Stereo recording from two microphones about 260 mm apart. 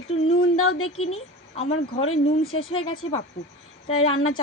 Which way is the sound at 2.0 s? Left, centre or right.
Left.